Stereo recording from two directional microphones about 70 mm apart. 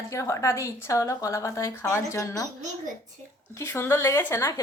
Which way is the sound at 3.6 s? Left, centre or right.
Left.